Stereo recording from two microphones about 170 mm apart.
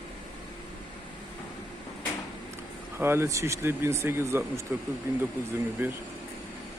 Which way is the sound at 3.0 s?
15° right (ahead or behind).